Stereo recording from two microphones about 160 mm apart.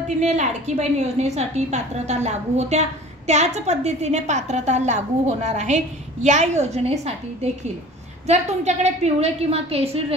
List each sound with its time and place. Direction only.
0.2 s a woman's voice: 45° right (ahead or behind)